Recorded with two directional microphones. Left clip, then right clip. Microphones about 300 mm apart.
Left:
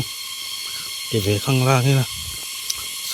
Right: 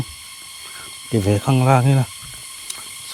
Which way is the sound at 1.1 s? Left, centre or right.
Centre.